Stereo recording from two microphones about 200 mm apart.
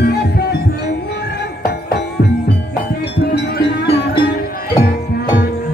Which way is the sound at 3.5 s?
55° left (ahead or behind).